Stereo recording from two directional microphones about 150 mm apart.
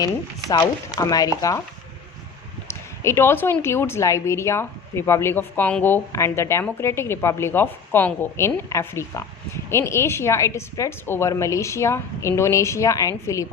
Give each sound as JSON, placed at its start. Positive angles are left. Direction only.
{"t": 0.0, "sound": "a woman's voice", "side_deg": 25}
{"t": 2.6, "sound": "a woman's voice", "side_deg": 15}